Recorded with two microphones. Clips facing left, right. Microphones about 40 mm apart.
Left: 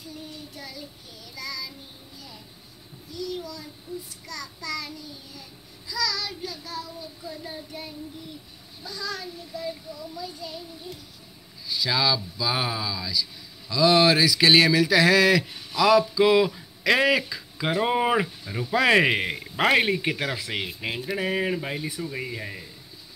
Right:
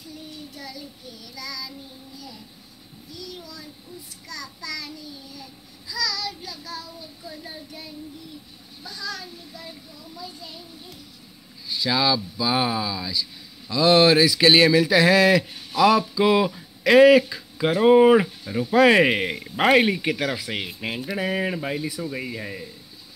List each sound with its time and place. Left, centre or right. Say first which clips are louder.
0.6 s child singing: right 2 dB; left
4.3 s child singing: left 1 dB; left
9.0 s child singing: even; left
11.8 s speech: right 2 dB; right
17.6 s speech: right 8 dB; centre
21.0 s speech: right 1 dB; centre